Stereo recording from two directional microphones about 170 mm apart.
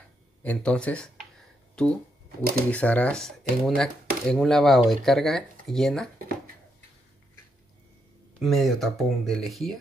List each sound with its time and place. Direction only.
0.4 s speech: 5° left (ahead or behind)
6.1 s a sound: 60° right (ahead or behind)
8.4 s speech: centre (ahead or behind)